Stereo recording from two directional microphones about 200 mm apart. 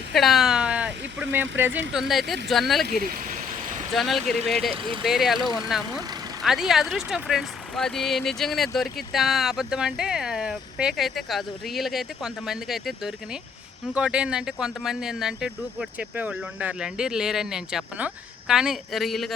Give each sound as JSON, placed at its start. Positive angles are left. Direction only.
{"t": 0.1, "sound": "a sound", "side_deg": 0}
{"t": 1.9, "sound": "speech", "side_deg": 0}
{"t": 3.0, "sound": "vehicle", "side_deg": -45}
{"t": 3.9, "sound": "speech", "side_deg": 0}
{"t": 4.7, "sound": "speech", "side_deg": -25}
{"t": 5.0, "sound": "speech", "side_deg": 0}